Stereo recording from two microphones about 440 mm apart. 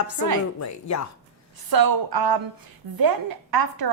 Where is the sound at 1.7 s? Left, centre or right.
Right.